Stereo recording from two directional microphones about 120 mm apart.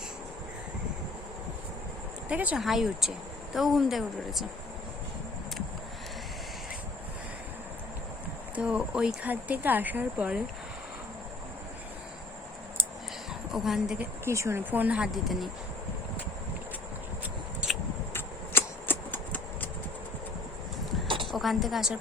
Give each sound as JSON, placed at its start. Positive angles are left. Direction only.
{"t": 2.3, "sound": "speech", "side_deg": -10}
{"t": 8.5, "sound": "speech", "side_deg": -10}
{"t": 13.5, "sound": "speech", "side_deg": -5}
{"t": 14.3, "sound": "speech", "side_deg": -25}
{"t": 17.6, "sound": "a sound", "side_deg": -10}
{"t": 18.1, "sound": "a sound", "side_deg": 20}
{"t": 21.2, "sound": "a woman's voice", "side_deg": 0}